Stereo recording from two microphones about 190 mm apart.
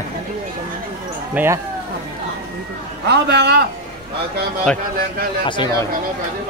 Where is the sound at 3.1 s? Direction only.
60° right (ahead or behind).